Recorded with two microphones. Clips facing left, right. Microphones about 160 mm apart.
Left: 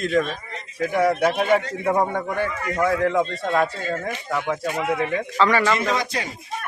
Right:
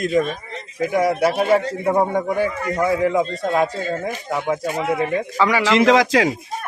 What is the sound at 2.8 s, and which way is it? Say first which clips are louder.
Speech: right 2 dB; 10° right (ahead or behind).